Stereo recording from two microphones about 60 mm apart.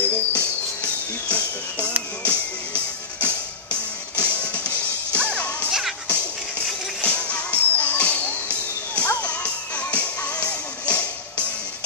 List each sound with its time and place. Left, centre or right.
0.0 s music: left
5.7 s music: centre
7.0 s music: left